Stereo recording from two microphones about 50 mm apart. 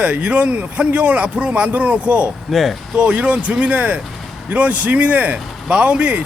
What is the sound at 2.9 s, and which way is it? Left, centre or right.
A man's voice, right.